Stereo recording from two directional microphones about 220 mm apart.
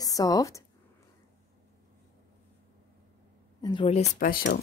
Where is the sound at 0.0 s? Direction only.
15° left (ahead or behind).